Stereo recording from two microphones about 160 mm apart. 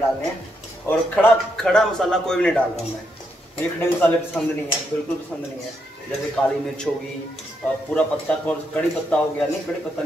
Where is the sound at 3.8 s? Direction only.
10° left (ahead or behind).